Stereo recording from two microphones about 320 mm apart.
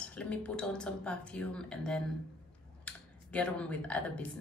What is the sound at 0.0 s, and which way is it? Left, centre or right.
Speech, centre.